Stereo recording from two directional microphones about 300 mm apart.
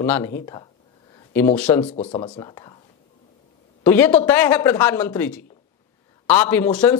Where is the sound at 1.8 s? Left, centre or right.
Centre.